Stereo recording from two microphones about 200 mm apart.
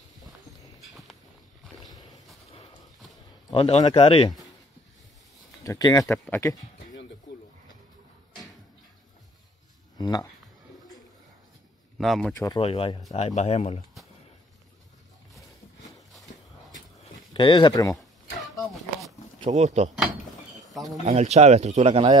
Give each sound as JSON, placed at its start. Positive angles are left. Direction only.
{"t": 1.9, "sound": "a sound", "side_deg": 20}
{"t": 3.4, "sound": "speech", "side_deg": 25}
{"t": 5.6, "sound": "speech", "side_deg": 15}
{"t": 6.1, "sound": "speech", "side_deg": 5}
{"t": 9.9, "sound": "a sound", "side_deg": 20}
{"t": 12.0, "sound": "speech", "side_deg": 0}
{"t": 12.4, "sound": "speech", "side_deg": 15}
{"t": 12.6, "sound": "a man's voice", "side_deg": 25}
{"t": 17.3, "sound": "speech", "side_deg": 25}
{"t": 17.9, "sound": "a sound", "side_deg": 0}
{"t": 19.4, "sound": "speech", "side_deg": -35}
{"t": 20.0, "sound": "door", "side_deg": 0}
{"t": 21.0, "sound": "speech", "side_deg": -35}